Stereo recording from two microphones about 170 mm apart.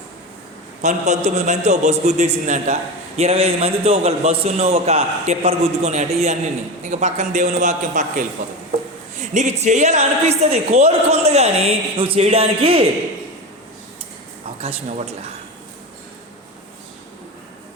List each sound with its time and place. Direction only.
0.8 s a woman's voice: 45° right (ahead or behind)
14.6 s a woman's voice: 40° right (ahead or behind)